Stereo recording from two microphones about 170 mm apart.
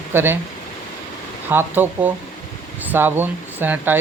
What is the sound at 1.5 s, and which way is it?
Speech, 10° right (ahead or behind).